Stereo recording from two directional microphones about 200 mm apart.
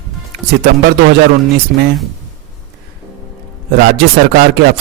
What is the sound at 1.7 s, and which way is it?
Speech, 55° right (ahead or behind).